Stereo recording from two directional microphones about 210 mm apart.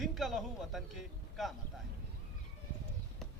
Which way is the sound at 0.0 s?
Centre (ahead or behind).